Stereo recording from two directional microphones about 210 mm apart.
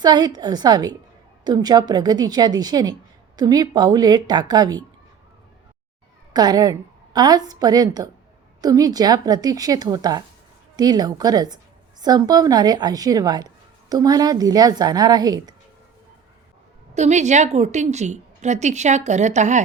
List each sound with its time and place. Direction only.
0.0 s a woman's voice: 20° right (ahead or behind)
6.3 s a woman's voice: 20° right (ahead or behind)
16.9 s a woman's voice: 35° right (ahead or behind)